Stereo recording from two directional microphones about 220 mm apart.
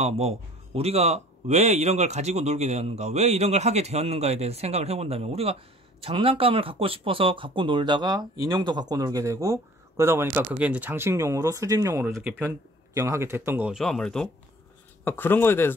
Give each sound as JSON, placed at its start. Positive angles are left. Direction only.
{"t": 0.0, "sound": "a man's voice", "side_deg": -30}